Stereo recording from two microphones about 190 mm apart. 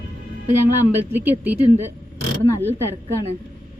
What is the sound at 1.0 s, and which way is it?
Speech, 10° right (ahead or behind).